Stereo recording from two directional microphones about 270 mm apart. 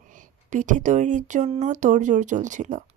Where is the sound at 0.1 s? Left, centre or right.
Right.